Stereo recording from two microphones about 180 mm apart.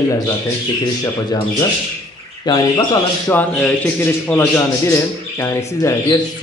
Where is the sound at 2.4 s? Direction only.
20° left (ahead or behind).